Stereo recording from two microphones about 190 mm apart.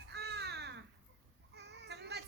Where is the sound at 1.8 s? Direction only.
65° right (ahead or behind).